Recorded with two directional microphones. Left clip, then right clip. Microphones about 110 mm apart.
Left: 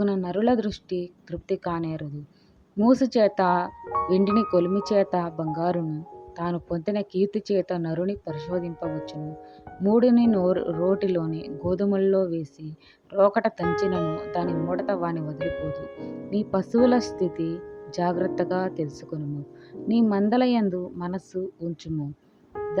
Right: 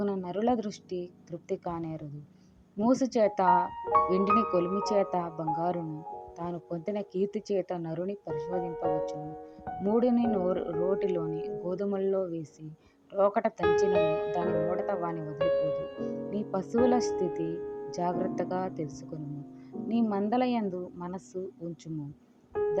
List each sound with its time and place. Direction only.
0.0 s a woman's voice: 25° left (ahead or behind)